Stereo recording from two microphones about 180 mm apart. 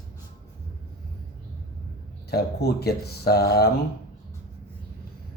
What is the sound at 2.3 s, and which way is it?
Speech, 60° left (ahead or behind).